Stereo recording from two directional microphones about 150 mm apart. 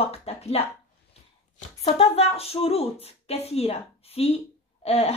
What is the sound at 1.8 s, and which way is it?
Speech, 45° left (ahead or behind).